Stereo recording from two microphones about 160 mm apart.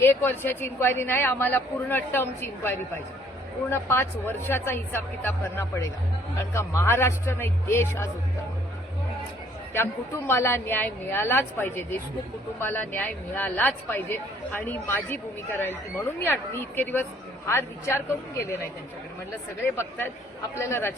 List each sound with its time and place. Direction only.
0.0 s speech: 15° left (ahead or behind)
9.7 s speech: 15° left (ahead or behind)
19.6 s speech: 15° left (ahead or behind)